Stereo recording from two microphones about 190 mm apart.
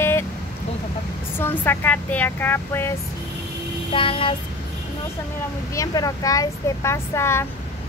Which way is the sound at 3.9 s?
30° left (ahead or behind).